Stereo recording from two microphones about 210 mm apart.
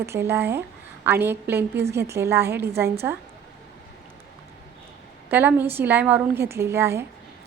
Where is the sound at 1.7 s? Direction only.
50° right (ahead or behind).